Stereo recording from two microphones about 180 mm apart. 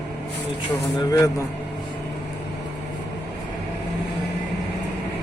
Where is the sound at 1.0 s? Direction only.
20° left (ahead or behind).